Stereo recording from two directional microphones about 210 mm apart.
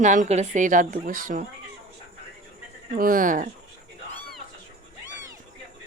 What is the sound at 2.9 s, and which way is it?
Speech, 40° right (ahead or behind).